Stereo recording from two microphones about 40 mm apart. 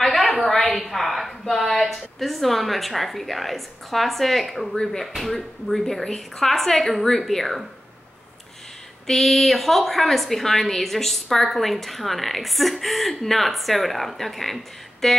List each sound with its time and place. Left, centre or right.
0.0 s a sound: centre
0.4 s a woman's voice: centre
9.0 s a woman's voice: centre